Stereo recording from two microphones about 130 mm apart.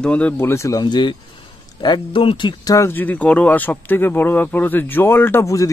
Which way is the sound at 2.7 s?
15° left (ahead or behind).